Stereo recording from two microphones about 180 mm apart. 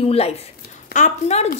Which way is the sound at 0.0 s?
35° left (ahead or behind).